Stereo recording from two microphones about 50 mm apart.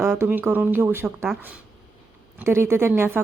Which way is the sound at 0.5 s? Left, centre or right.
Right.